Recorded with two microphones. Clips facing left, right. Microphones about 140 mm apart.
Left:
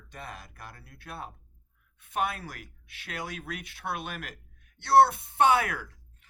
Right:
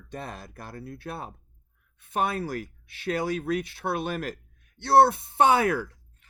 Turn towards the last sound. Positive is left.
turn(degrees=-30)  # may be behind; listen again after turning